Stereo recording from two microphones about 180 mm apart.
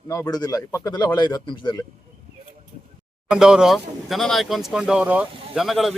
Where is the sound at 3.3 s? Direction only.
5° right (ahead or behind).